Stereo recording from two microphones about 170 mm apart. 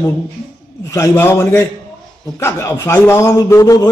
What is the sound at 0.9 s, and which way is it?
A man's voice, 15° left (ahead or behind).